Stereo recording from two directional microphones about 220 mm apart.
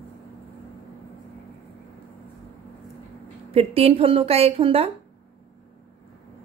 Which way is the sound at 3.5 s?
25° right (ahead or behind).